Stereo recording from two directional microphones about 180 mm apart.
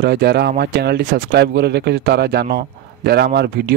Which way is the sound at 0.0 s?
65° right (ahead or behind).